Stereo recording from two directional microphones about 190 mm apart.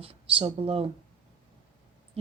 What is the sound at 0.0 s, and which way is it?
Speech, 30° right (ahead or behind).